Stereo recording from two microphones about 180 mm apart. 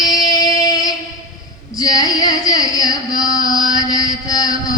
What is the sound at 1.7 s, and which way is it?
Female singing, 20° left (ahead or behind).